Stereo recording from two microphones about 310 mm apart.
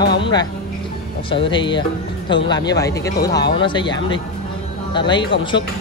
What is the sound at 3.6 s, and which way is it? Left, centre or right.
Speech, centre.